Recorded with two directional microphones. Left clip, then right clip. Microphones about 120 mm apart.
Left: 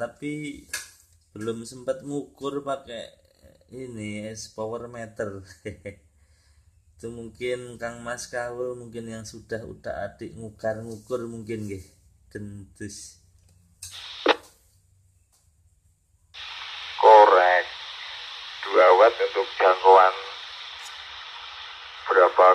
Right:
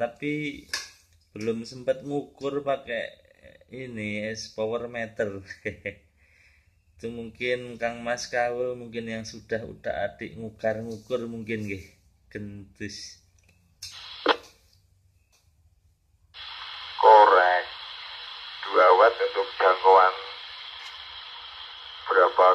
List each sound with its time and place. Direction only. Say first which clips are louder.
0.0 s speech: right 3 dB; 15° left (ahead or behind)
7.1 s speech: right 2 dB; 20° left (ahead or behind)
13.8 s a sound: left 2 dB; 40° left (ahead or behind)
16.3 s radio: left 2 dB; 40° left (ahead or behind)